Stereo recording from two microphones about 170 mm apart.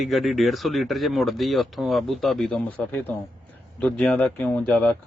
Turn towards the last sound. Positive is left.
turn(degrees=5)  # may be behind; listen again after turning